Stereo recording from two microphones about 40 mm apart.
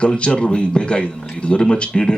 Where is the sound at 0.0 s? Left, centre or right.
Left.